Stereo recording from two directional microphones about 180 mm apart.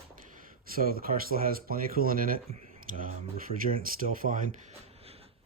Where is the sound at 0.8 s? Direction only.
55° right (ahead or behind).